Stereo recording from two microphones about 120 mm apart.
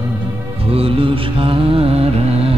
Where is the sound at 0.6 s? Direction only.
50° right (ahead or behind).